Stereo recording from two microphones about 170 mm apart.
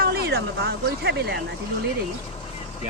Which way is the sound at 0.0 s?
70° right (ahead or behind).